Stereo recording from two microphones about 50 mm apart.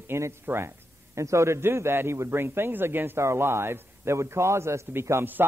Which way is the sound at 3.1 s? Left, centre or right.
Right.